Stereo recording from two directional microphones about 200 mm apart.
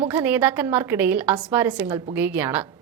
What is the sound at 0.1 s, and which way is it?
A woman's voice, 10° right (ahead or behind).